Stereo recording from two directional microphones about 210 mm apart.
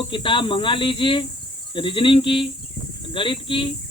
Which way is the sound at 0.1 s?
25° left (ahead or behind).